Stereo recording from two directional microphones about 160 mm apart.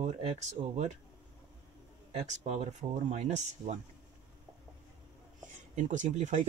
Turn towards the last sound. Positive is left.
turn(degrees=-50)  # may be behind; listen again after turning